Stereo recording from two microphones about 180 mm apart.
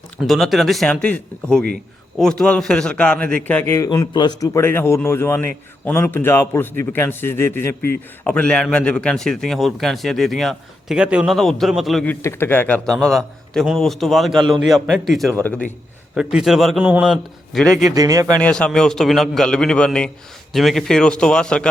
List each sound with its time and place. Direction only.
0.2 s a man's voice: centre (ahead or behind)
12.2 s a man's voice: 15° left (ahead or behind)
17.9 s speech: 20° right (ahead or behind)
18.3 s a man's voice: 5° left (ahead or behind)